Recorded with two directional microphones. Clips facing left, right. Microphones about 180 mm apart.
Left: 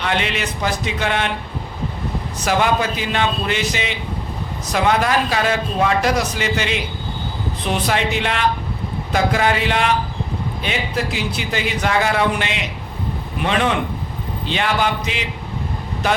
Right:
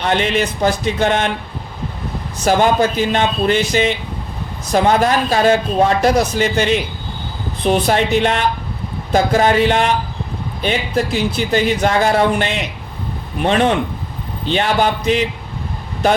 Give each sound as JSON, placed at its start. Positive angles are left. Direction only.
{"t": 0.0, "sound": "a man's voice", "side_deg": -45}
{"t": 2.4, "sound": "a man's voice", "side_deg": -40}
{"t": 6.4, "sound": "a man's voice", "side_deg": -45}
{"t": 11.8, "sound": "a man's voice", "side_deg": -35}